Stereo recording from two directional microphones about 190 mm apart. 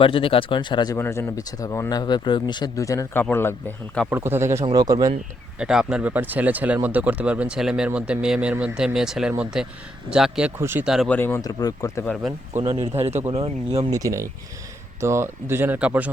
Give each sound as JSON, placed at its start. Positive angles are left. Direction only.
{"t": 0.0, "sound": "speech", "side_deg": 30}
{"t": 0.9, "sound": "speech", "side_deg": 10}
{"t": 4.1, "sound": "a man's voice", "side_deg": -10}
{"t": 5.5, "sound": "speech", "side_deg": -5}
{"t": 11.1, "sound": "speech", "side_deg": 10}
{"t": 12.0, "sound": "speech", "side_deg": 0}
{"t": 12.6, "sound": "a man's voice", "side_deg": -25}
{"t": 13.9, "sound": "speech", "side_deg": -15}